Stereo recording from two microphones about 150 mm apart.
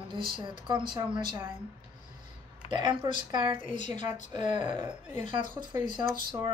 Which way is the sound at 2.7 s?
30° right (ahead or behind).